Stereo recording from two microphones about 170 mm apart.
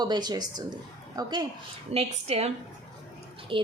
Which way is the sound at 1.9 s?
40° right (ahead or behind).